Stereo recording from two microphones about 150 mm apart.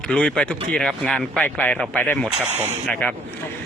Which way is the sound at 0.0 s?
5° left (ahead or behind).